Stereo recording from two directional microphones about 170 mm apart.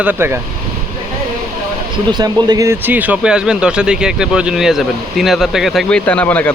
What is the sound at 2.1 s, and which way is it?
Speech, 25° right (ahead or behind).